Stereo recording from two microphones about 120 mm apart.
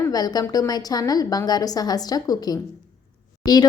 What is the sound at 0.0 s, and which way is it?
A woman's voice, 30° left (ahead or behind).